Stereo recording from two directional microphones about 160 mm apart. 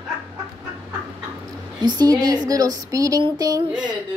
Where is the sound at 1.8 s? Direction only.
25° right (ahead or behind).